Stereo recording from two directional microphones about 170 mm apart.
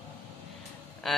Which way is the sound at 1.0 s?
Centre (ahead or behind).